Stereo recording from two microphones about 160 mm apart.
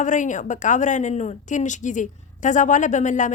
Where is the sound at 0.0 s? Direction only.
50° left (ahead or behind).